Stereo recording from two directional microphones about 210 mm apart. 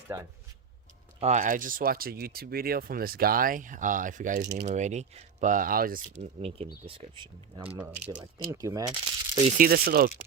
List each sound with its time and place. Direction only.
0.1 s speech: 10° right (ahead or behind)
1.2 s speech: 35° right (ahead or behind)
4.4 s speech: 50° right (ahead or behind)
4.7 s speech: 35° right (ahead or behind)
6.4 s speech: 30° right (ahead or behind)
8.2 s speech: 15° right (ahead or behind)
9.5 s speech: 40° right (ahead or behind)